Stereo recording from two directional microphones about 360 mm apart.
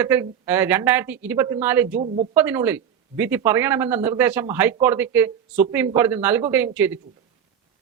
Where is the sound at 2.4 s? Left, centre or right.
Centre.